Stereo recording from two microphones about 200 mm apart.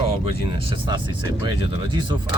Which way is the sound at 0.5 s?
25° right (ahead or behind).